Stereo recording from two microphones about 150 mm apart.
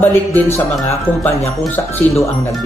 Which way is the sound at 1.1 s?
10° left (ahead or behind).